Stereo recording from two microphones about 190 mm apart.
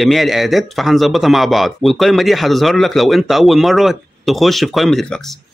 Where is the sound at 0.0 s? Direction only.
Centre (ahead or behind).